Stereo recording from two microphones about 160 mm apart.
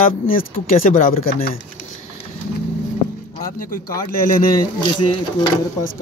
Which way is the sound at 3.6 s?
60° left (ahead or behind).